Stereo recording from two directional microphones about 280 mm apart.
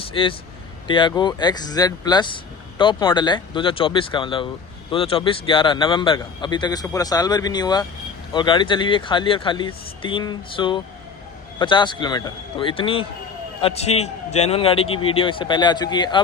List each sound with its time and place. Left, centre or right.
0.0 s a man's voice: centre